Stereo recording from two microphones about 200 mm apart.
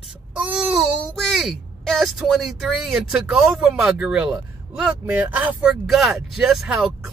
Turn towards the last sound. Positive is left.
turn(degrees=-5)  # may be behind; listen again after turning